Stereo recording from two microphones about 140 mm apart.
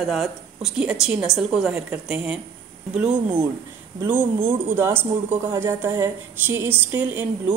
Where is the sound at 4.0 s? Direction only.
15° right (ahead or behind).